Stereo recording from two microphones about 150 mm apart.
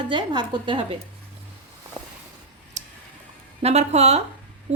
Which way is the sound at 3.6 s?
45° right (ahead or behind).